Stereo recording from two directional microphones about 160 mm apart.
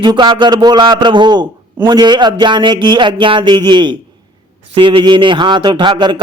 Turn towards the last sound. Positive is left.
turn(degrees=-30)  # may be behind; listen again after turning